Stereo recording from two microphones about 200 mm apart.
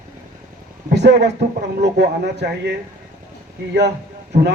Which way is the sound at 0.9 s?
55° right (ahead or behind).